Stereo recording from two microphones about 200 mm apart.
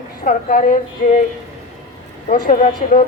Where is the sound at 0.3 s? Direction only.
45° left (ahead or behind).